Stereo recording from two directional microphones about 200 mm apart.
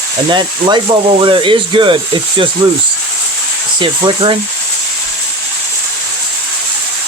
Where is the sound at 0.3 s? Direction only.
20° right (ahead or behind).